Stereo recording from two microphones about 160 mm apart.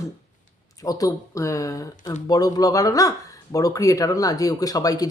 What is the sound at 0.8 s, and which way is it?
A man's voice, 20° left (ahead or behind).